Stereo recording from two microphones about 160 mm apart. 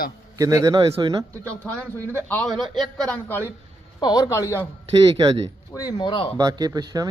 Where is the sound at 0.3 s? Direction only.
20° right (ahead or behind).